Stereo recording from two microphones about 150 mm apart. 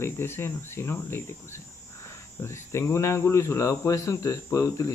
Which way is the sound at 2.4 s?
15° left (ahead or behind).